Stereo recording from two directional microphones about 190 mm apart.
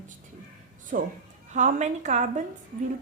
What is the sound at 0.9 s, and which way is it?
A woman's voice, 45° right (ahead or behind).